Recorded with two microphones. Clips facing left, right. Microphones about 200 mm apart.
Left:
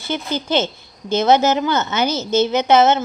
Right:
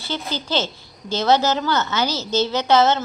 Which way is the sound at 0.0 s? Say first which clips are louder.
Left 4 dB; 20° left (ahead or behind).